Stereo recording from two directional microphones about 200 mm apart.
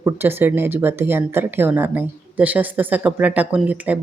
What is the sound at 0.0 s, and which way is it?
Speech, 10° right (ahead or behind).